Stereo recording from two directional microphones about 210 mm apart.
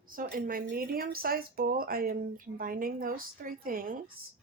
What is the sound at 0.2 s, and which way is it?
A woman's voice, 45° right (ahead or behind).